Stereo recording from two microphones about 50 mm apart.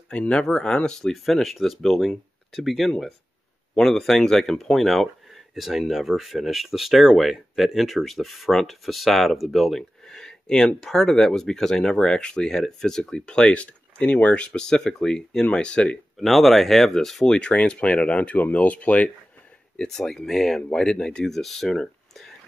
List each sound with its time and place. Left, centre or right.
0.1 s speech: left
1.0 s speech: centre; by 16.0 s left
16.2 s speech: centre; by 19.0 s left
19.9 s speech: centre